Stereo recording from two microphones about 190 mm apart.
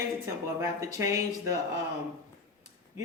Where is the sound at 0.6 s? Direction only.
15° right (ahead or behind).